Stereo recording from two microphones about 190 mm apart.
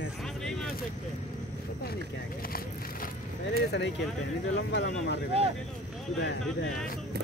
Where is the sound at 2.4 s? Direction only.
50° left (ahead or behind).